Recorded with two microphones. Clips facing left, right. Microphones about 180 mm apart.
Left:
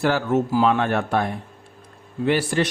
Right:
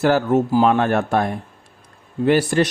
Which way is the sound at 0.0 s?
40° right (ahead or behind).